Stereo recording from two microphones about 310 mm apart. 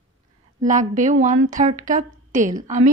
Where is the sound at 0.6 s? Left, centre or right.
Right.